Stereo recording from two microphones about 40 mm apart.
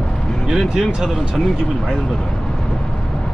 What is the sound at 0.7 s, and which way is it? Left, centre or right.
Speech, centre.